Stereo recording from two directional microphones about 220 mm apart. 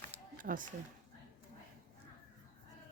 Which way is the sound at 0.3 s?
40° right (ahead or behind).